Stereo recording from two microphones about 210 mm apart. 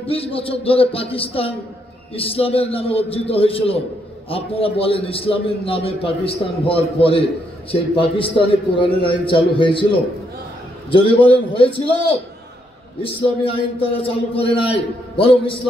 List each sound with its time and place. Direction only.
0.0 s a man's voice: 25° left (ahead or behind)
10.9 s a man's voice: 25° left (ahead or behind)
13.0 s a man's voice: 25° left (ahead or behind)